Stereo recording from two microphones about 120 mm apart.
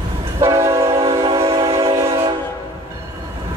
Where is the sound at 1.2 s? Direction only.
50° right (ahead or behind).